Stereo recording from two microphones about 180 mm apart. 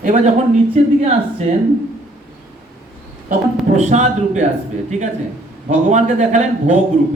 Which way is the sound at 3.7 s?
40° right (ahead or behind).